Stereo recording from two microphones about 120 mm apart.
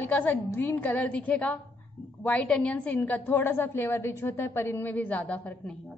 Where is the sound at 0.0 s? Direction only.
15° left (ahead or behind).